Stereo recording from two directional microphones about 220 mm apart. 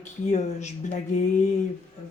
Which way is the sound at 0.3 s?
30° left (ahead or behind).